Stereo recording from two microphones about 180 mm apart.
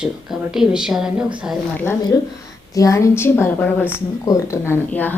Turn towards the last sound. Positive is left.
turn(degrees=10)  # may be behind; listen again after turning